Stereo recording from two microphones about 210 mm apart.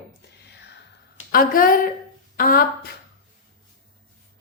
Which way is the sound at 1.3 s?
45° left (ahead or behind).